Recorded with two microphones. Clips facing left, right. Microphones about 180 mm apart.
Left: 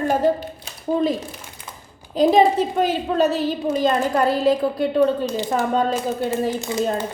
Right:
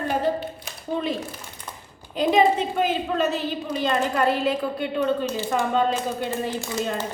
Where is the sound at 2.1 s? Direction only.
35° left (ahead or behind).